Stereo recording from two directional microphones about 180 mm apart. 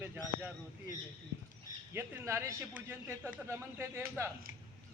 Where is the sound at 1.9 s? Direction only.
15° right (ahead or behind).